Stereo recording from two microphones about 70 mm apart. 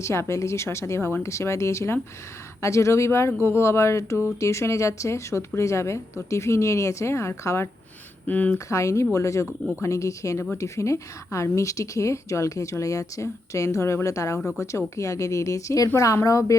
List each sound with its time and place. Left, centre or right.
0.0 s speech: left
3.4 s a sound: left
4.4 s speech: left
8.3 s speech: left
8.5 s speech: left
14.3 s speech: centre
14.6 s speech: left